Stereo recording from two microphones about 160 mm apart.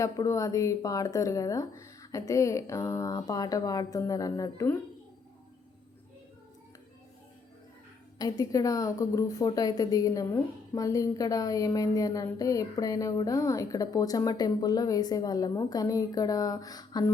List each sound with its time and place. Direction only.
0.0 s a woman's voice: 20° left (ahead or behind)
8.2 s a woman's voice: 20° left (ahead or behind)